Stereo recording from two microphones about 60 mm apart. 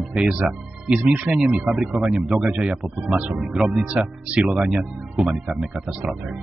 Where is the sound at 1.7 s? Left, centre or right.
Centre.